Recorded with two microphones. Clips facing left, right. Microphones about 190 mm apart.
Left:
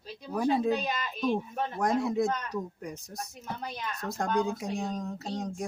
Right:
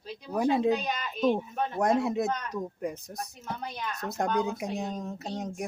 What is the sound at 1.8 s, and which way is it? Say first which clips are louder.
Speech: right 1 dB; 25° right (ahead or behind).